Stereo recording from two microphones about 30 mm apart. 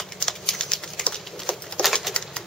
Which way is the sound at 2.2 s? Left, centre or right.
Left.